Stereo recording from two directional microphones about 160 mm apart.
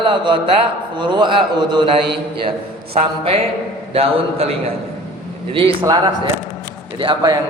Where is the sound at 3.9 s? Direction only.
35° right (ahead or behind).